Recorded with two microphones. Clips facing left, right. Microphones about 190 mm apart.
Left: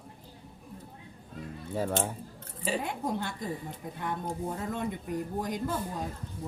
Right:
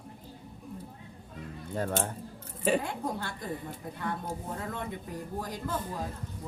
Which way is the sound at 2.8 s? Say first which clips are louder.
Left 2 dB; 20° left (ahead or behind).